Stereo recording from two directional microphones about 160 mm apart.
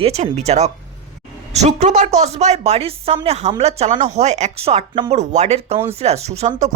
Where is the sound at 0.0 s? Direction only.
40° right (ahead or behind).